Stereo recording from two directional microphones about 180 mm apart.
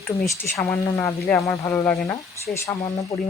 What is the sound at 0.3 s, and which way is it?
Speech, 15° left (ahead or behind).